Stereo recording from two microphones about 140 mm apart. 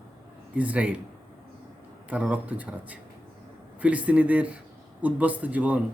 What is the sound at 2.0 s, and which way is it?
Speech, 10° right (ahead or behind).